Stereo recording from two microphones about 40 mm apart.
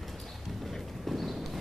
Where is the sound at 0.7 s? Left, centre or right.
Centre.